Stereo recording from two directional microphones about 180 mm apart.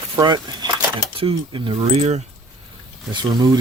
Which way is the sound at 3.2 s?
25° right (ahead or behind).